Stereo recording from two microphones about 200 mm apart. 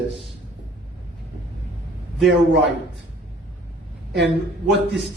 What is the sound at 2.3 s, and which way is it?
Speech, 60° right (ahead or behind).